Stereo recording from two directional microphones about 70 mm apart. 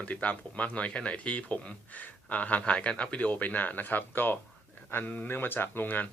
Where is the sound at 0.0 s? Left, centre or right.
Centre.